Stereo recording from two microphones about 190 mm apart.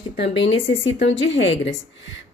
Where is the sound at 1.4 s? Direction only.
70° left (ahead or behind).